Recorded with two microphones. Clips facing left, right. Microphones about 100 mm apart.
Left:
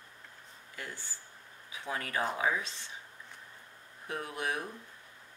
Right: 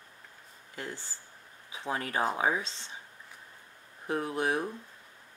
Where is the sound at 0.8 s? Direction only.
30° right (ahead or behind).